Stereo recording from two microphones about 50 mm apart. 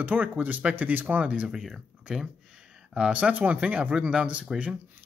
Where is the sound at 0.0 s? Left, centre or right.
Right.